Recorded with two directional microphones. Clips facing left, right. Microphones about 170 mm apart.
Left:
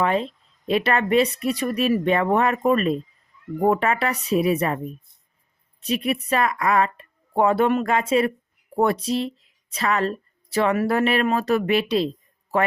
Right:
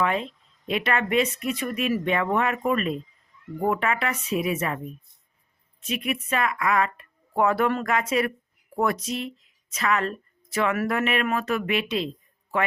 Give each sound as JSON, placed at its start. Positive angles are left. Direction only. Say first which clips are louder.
{"t": 0.0, "sound": "speech", "louder": "left 3 dB", "side_deg": 35}
{"t": 5.8, "sound": "a woman's voice", "louder": "left 5 dB", "side_deg": 35}